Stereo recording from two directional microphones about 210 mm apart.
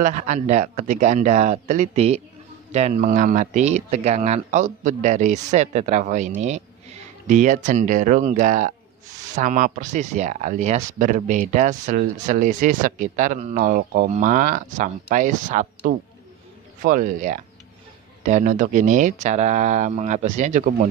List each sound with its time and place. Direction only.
0.0 s speech: 35° right (ahead or behind)
16.8 s speech: 40° right (ahead or behind)